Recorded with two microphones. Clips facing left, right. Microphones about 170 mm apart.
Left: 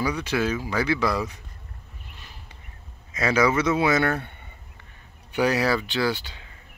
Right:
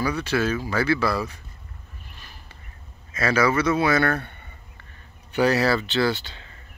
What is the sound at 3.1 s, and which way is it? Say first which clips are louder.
Speech: even; 20° left (ahead or behind).